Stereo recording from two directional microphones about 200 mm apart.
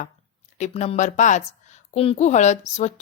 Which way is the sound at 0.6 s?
35° left (ahead or behind).